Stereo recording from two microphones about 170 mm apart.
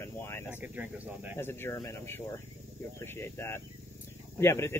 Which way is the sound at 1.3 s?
15° left (ahead or behind).